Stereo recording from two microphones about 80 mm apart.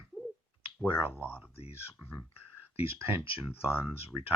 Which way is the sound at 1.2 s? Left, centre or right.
Left.